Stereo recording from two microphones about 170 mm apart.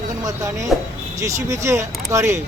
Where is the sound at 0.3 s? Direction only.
20° right (ahead or behind).